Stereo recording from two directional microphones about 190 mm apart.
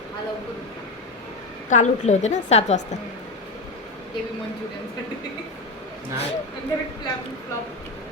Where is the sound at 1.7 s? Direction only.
40° left (ahead or behind).